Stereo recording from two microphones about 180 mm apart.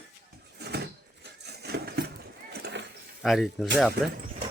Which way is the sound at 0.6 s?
65° right (ahead or behind).